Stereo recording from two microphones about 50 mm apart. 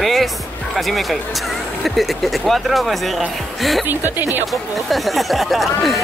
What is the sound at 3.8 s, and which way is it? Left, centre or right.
Speech, right.